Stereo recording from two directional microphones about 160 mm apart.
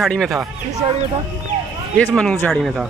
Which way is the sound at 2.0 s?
5° left (ahead or behind).